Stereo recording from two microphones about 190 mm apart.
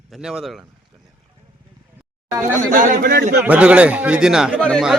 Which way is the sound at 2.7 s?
50° right (ahead or behind).